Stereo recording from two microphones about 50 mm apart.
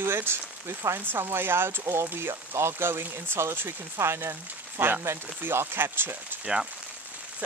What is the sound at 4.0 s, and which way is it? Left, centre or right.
Speech, right.